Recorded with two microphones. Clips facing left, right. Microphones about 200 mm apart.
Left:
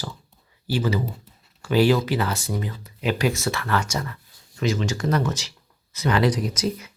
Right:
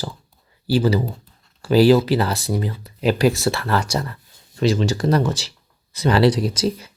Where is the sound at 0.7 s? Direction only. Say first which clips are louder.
Right 6 dB; 35° right (ahead or behind).